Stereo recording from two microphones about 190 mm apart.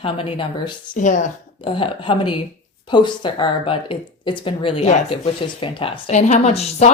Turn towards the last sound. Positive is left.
turn(degrees=35)  # may be behind; listen again after turning